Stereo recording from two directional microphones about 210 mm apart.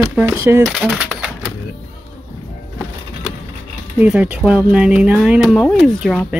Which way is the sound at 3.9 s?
5° right (ahead or behind).